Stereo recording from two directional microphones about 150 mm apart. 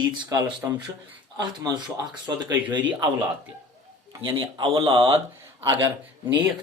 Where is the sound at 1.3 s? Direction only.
30° right (ahead or behind).